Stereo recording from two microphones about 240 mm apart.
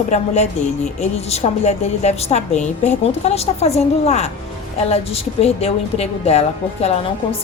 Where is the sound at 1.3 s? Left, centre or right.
Left.